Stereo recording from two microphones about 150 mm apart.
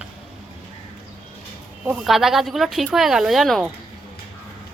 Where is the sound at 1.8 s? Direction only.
Centre (ahead or behind).